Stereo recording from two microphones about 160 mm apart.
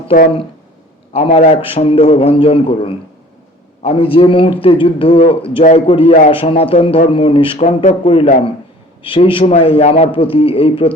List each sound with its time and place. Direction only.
1.1 s a man's voice: 40° left (ahead or behind)